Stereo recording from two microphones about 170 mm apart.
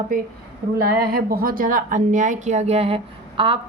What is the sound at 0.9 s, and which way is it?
A woman's voice, 65° right (ahead or behind).